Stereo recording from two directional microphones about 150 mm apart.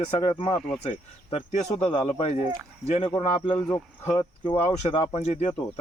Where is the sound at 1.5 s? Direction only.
45° left (ahead or behind).